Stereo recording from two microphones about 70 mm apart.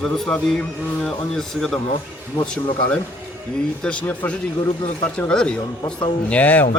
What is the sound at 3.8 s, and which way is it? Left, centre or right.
Speech, centre.